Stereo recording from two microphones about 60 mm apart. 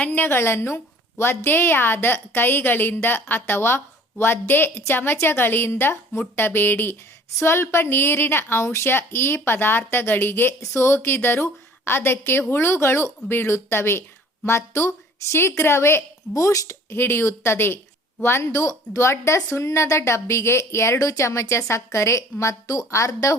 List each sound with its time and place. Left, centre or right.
0.0 s a woman's voice: left
0.3 s a woman's voice: left
7.3 s a woman's voice: left
10.6 s a woman's voice: left
16.3 s a woman's voice: left
16.9 s speech: left
18.5 s a woman's voice: left